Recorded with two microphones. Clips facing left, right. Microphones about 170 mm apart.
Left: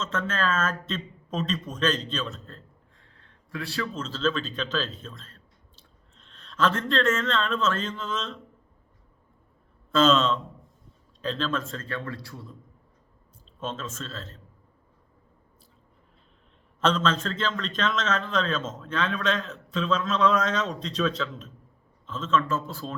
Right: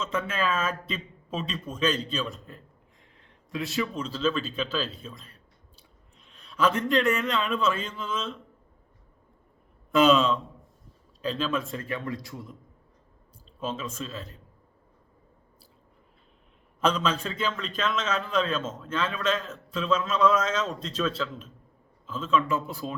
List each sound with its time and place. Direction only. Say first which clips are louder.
0.0 s a man's voice: even; 10° right (ahead or behind)
9.9 s a man's voice: right 1 dB; 10° right (ahead or behind)
13.6 s a man's voice: right 1 dB; 10° right (ahead or behind)
16.8 s a man's voice: left 1 dB; 10° right (ahead or behind)